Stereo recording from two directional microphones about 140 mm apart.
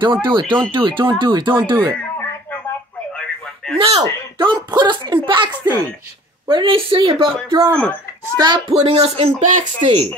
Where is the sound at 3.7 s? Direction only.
45° right (ahead or behind).